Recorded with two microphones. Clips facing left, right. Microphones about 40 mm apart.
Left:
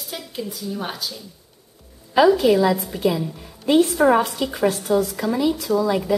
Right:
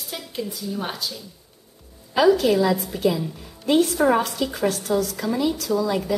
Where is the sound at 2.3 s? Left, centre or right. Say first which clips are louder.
Left 2 dB; left.